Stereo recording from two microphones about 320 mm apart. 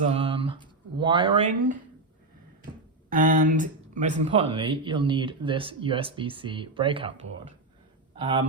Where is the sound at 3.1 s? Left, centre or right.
Right.